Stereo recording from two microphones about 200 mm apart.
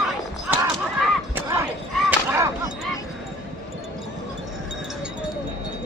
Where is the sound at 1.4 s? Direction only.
15° right (ahead or behind).